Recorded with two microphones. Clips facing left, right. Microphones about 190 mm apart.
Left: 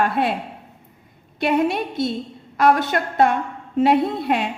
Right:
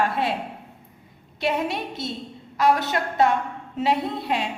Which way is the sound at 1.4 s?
55° left (ahead or behind).